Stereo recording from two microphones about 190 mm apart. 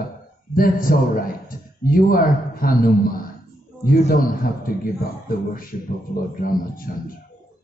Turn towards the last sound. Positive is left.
turn(degrees=50)  # may be behind; listen again after turning